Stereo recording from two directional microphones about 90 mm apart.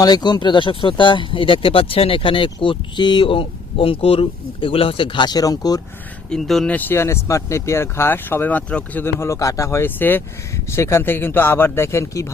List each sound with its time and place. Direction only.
0.0 s speech: 50° left (ahead or behind)
6.3 s speech: 5° left (ahead or behind)
6.7 s speech: 20° left (ahead or behind)
9.1 s speech: 30° left (ahead or behind)